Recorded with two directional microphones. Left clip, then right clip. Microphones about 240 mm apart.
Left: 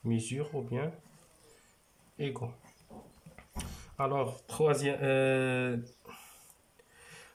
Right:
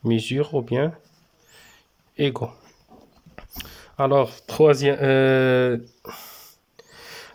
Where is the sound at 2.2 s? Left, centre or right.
Right.